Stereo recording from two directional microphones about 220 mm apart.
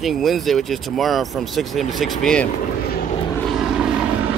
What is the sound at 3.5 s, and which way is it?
Vehicle, centre (ahead or behind).